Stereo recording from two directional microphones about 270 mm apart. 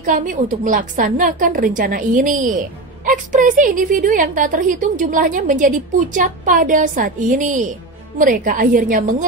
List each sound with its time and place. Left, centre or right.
0.0 s a woman's voice: right